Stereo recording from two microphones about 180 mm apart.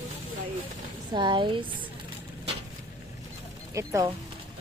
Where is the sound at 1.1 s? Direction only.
25° right (ahead or behind).